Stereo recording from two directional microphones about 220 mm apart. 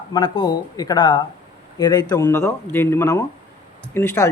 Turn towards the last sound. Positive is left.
turn(degrees=10)  # may be behind; listen again after turning